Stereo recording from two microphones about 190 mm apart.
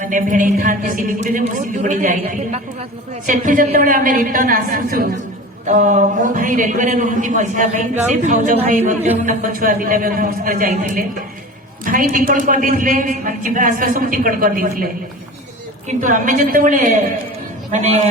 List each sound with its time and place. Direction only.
0.0 s a man's voice: 45° right (ahead or behind)
15.9 s a man's voice: 40° right (ahead or behind)